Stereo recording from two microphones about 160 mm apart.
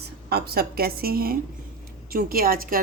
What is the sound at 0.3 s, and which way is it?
A woman's voice, 75° right (ahead or behind).